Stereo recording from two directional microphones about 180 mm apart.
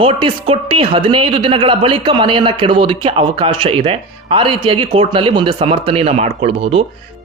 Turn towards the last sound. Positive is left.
turn(degrees=-35)  # may be behind; listen again after turning